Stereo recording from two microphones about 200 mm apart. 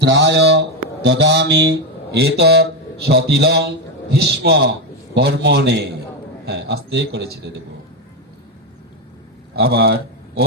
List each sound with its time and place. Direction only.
0.0 s speech: 60° right (ahead or behind)
9.6 s speech: 55° right (ahead or behind)